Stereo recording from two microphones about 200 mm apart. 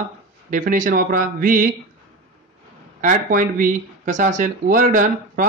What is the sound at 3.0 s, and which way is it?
Speech, 40° right (ahead or behind).